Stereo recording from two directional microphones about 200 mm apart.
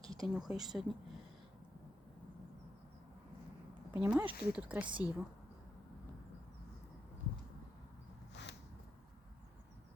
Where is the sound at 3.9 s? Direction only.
10° right (ahead or behind).